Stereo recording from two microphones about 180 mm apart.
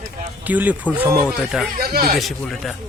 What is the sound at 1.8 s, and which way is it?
Speech, 55° right (ahead or behind).